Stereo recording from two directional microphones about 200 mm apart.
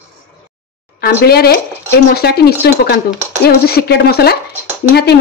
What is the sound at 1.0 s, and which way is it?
A woman's voice, 50° left (ahead or behind).